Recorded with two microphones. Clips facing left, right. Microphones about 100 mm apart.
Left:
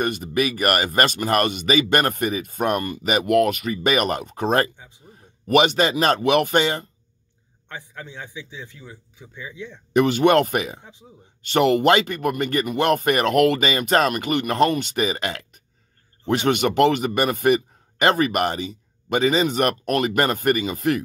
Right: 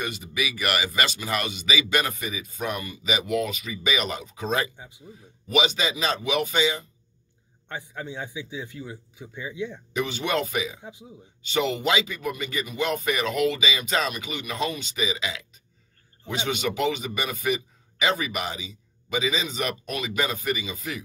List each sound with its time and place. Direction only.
0.0 s speech: 55° left (ahead or behind)
7.6 s a man's voice: 10° right (ahead or behind)
9.9 s speech: 65° left (ahead or behind)
10.8 s a man's voice: 10° right (ahead or behind)
11.4 s speech: 60° left (ahead or behind)